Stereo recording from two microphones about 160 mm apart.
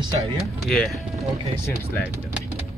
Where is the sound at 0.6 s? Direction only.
5° left (ahead or behind).